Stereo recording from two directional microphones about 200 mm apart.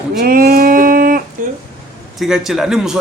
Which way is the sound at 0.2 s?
45° right (ahead or behind).